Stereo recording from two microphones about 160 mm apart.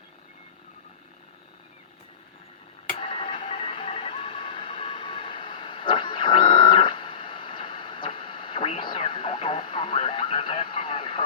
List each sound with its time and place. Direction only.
3.0 s music: 35° left (ahead or behind)